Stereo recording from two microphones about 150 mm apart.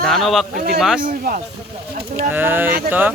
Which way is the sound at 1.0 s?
65° right (ahead or behind).